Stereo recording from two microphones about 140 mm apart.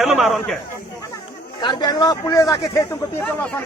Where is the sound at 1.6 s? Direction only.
30° left (ahead or behind).